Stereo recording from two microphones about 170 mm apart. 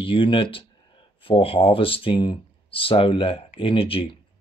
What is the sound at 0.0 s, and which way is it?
Speech, 30° left (ahead or behind).